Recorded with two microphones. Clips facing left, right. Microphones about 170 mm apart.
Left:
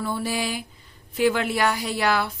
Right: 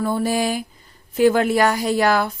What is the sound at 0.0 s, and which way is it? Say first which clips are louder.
A woman's voice: right 6 dB; 45° right (ahead or behind).